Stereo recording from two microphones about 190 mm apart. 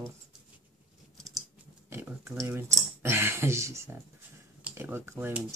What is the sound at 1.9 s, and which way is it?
Speech, 10° right (ahead or behind).